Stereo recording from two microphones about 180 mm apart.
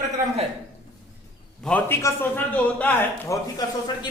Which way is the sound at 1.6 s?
5° left (ahead or behind).